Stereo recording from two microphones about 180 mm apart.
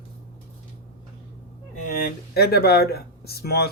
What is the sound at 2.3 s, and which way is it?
Speech, 60° left (ahead or behind).